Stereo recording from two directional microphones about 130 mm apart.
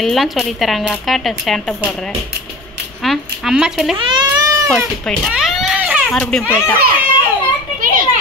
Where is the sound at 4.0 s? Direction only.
40° right (ahead or behind).